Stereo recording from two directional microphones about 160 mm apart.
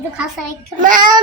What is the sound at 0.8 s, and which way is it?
Speech, 55° right (ahead or behind).